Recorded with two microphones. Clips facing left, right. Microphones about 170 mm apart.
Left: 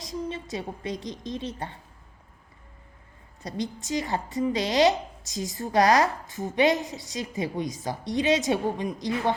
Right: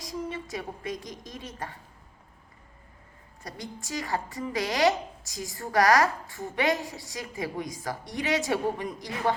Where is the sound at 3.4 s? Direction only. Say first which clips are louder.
Left 8 dB; 20° left (ahead or behind).